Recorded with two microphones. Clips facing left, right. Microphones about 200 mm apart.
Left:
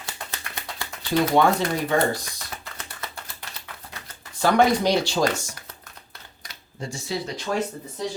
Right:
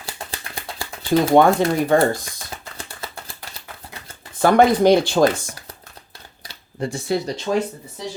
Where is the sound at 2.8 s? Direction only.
30° right (ahead or behind).